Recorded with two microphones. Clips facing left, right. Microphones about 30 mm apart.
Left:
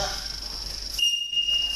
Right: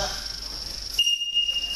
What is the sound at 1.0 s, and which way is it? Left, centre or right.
Smoke detector, centre.